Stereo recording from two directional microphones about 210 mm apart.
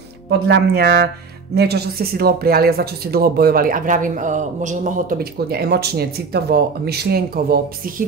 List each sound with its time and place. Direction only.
0.3 s speech: 50° right (ahead or behind)